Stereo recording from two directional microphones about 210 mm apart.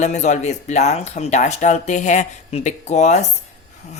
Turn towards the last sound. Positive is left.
turn(degrees=35)  # may be behind; listen again after turning